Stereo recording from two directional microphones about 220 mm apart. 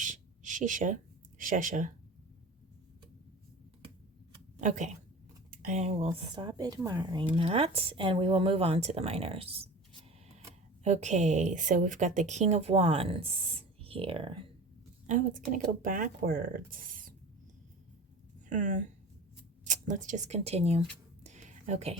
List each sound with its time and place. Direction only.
0.0 s a sound: 35° right (ahead or behind)
1.4 s a woman's voice: 35° right (ahead or behind)
4.6 s a woman's voice: 35° right (ahead or behind)
6.1 s speech: 20° right (ahead or behind)
10.8 s a woman's voice: 30° right (ahead or behind)
15.0 s a woman's voice: 35° right (ahead or behind)
18.4 s speech: 35° right (ahead or behind)
21.2 s a sound: 30° right (ahead or behind)